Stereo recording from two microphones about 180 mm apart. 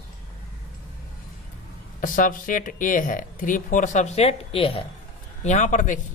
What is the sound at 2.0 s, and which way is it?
Speech, 50° left (ahead or behind).